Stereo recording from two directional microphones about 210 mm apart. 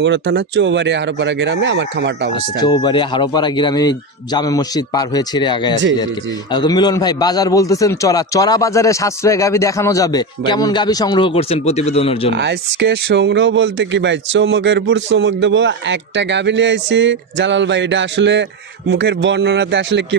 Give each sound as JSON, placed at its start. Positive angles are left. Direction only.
{"t": 0.0, "sound": "speech", "side_deg": -55}
{"t": 2.6, "sound": "a man's voice", "side_deg": 20}
{"t": 12.4, "sound": "speech", "side_deg": -55}